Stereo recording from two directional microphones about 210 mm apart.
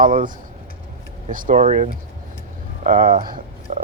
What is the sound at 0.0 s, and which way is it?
Speech, 40° right (ahead or behind).